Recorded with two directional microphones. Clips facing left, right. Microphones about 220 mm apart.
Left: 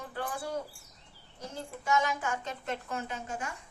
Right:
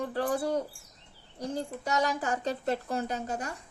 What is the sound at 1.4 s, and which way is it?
A woman's voice, 35° right (ahead or behind).